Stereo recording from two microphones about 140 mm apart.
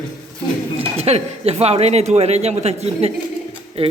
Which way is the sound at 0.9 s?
45° right (ahead or behind).